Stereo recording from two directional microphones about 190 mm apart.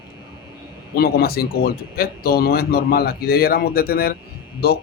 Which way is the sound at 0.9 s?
55° left (ahead or behind).